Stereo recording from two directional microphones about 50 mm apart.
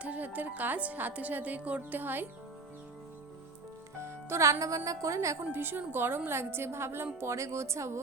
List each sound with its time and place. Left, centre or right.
0.0 s speech: right
3.9 s music: right
4.9 s a woman's voice: right
5.5 s a woman's voice: right
7.3 s a woman's voice: right